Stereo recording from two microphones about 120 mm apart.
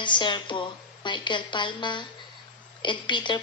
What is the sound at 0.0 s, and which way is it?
Speech, 40° left (ahead or behind).